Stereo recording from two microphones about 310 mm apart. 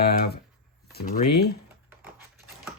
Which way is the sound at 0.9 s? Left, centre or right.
Left.